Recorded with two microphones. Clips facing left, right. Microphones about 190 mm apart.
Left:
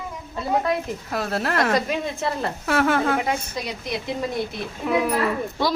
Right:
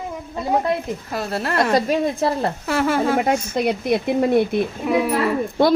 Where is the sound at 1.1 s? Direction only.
Centre (ahead or behind).